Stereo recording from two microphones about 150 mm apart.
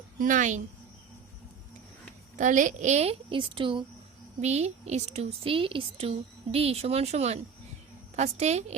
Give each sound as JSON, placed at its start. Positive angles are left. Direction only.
{"t": 0.2, "sound": "a woman's voice", "side_deg": -55}
{"t": 2.3, "sound": "speech", "side_deg": -55}
{"t": 4.4, "sound": "speech", "side_deg": -45}